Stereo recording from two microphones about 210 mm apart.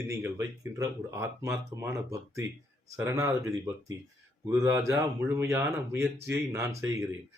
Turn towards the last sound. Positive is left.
turn(degrees=-15)  # may be behind; listen again after turning